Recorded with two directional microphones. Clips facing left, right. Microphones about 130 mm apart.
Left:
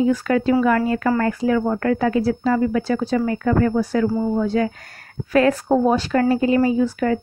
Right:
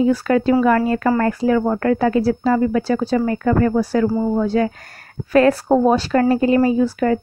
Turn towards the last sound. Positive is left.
turn(degrees=-40)  # may be behind; listen again after turning